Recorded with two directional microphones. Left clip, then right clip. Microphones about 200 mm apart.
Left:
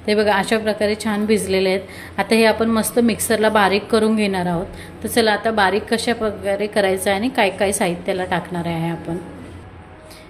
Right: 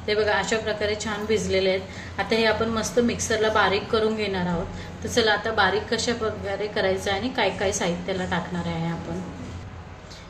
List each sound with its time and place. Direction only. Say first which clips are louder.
0.0 s a woman's voice: left 6 dB; 45° left (ahead or behind)